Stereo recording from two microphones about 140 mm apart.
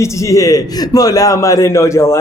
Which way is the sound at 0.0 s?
25° left (ahead or behind).